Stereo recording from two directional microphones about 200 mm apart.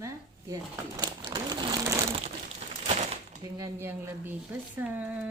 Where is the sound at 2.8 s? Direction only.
35° right (ahead or behind).